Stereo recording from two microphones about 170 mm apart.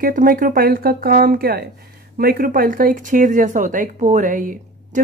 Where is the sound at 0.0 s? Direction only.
55° right (ahead or behind).